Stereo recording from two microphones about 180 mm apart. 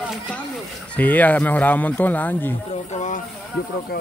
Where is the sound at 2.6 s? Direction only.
40° left (ahead or behind).